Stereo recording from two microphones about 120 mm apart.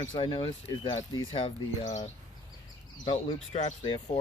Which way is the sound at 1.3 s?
50° left (ahead or behind).